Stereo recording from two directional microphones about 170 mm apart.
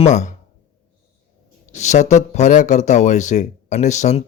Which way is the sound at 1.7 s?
45° left (ahead or behind).